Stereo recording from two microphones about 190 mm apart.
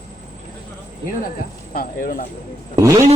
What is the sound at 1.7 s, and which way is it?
Speech, 50° left (ahead or behind).